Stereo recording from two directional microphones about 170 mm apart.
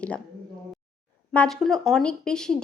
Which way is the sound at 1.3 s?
5° left (ahead or behind).